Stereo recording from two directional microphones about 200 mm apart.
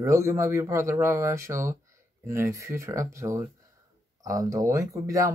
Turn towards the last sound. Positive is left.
turn(degrees=-15)  # may be behind; listen again after turning